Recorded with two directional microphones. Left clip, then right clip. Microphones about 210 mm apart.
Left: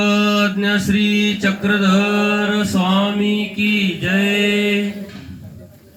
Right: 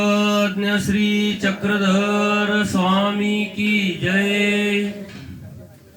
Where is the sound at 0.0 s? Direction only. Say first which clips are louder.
Left 2 dB; 25° right (ahead or behind).